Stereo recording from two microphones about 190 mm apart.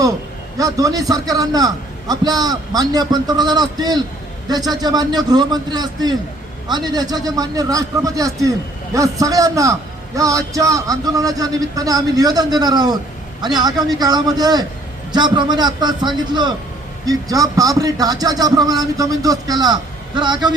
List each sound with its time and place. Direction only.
0.6 s a man's voice: 20° right (ahead or behind)